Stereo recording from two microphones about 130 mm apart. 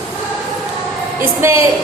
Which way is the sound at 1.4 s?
20° right (ahead or behind).